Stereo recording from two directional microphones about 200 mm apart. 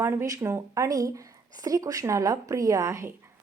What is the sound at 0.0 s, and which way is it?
Speech, 10° right (ahead or behind).